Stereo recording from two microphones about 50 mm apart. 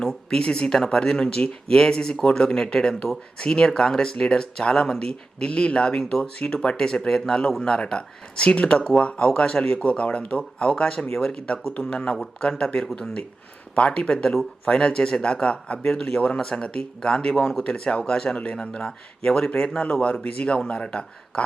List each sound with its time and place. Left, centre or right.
0.0 s speech: centre